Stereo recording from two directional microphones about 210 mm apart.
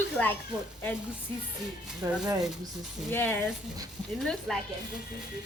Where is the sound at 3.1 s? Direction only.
10° left (ahead or behind).